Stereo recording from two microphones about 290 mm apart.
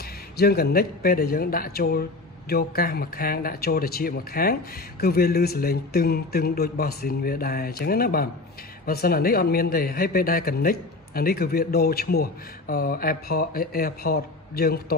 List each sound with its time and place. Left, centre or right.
0.4 s speech: left